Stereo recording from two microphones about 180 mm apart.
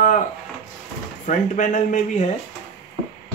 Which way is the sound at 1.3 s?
45° left (ahead or behind).